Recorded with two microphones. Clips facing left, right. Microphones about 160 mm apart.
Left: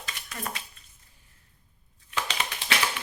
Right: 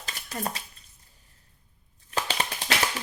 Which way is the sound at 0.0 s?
35° right (ahead or behind).